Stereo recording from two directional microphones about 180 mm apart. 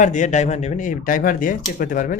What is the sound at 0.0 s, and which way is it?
Speech, 45° left (ahead or behind).